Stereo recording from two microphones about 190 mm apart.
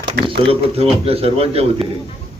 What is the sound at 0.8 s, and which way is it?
A man's voice, 30° right (ahead or behind).